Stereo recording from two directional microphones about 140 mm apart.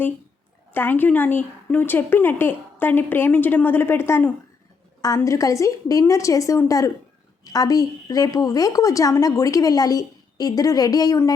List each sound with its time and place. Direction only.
0.7 s a woman's voice: 15° left (ahead or behind)